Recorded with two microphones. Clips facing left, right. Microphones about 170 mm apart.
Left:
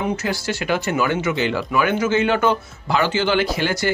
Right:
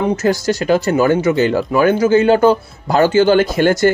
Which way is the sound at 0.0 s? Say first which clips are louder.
Right 8 dB; 45° right (ahead or behind).